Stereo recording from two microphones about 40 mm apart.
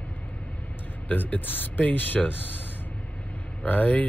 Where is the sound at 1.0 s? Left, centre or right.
Left.